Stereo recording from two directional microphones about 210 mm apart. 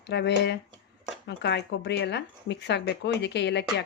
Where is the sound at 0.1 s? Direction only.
55° left (ahead or behind).